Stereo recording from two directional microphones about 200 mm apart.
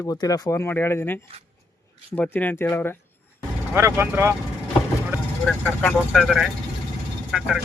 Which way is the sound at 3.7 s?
10° right (ahead or behind).